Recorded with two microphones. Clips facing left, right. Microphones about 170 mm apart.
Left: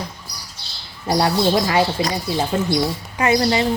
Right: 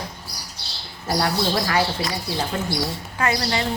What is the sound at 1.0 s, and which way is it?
Speech, 20° left (ahead or behind).